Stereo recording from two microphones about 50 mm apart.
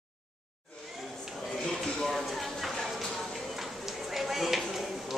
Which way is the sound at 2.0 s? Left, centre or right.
Centre.